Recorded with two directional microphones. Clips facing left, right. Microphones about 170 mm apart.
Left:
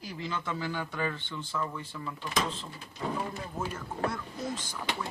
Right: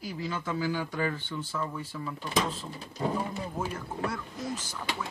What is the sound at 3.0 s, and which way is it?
Speech, 30° right (ahead or behind).